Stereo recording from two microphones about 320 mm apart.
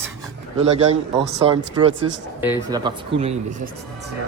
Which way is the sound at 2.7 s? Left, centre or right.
Centre.